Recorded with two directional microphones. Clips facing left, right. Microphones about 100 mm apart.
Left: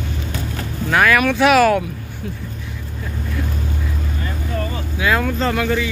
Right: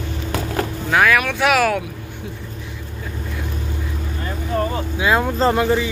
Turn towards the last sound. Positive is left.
turn(degrees=-25)  # may be behind; listen again after turning